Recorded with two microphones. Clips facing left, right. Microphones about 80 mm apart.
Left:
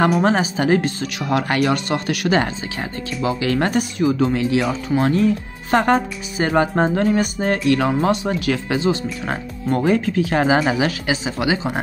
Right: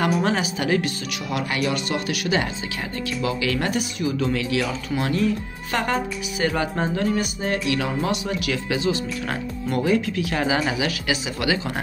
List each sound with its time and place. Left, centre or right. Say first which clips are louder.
0.2 s speech: left 5 dB; left
1.1 s speech: left 8 dB; left
3.2 s speech: left 5 dB; left
4.3 s speech: left 5 dB; left
9.2 s speech: left 2 dB; left
9.8 s speech: left 4 dB; left
11.3 s speech: left 3 dB; left